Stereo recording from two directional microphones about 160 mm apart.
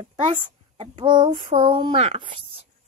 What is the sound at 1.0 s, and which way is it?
A child's voice, 30° right (ahead or behind).